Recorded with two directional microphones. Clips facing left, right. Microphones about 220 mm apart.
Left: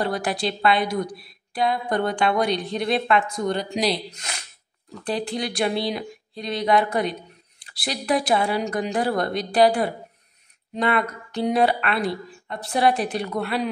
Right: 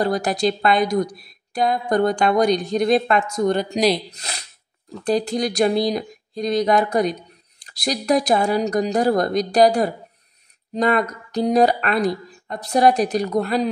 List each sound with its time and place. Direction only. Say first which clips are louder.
0.0 s speech: right 5 dB; 40° right (ahead or behind)